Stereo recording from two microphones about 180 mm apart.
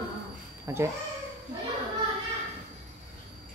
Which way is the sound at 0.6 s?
15° right (ahead or behind).